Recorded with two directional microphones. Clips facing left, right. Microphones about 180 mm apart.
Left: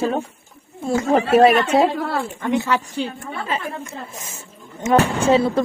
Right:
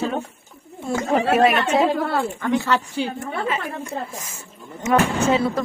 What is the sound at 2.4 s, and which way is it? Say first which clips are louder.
Speech: left 2 dB; 20° left (ahead or behind).